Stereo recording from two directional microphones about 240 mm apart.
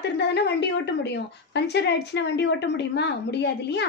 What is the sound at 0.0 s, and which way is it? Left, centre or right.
A woman's voice, left.